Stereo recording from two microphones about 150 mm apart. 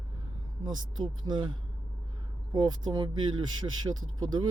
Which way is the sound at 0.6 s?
30° right (ahead or behind).